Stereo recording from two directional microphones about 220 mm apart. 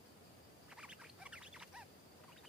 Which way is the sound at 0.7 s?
5° right (ahead or behind).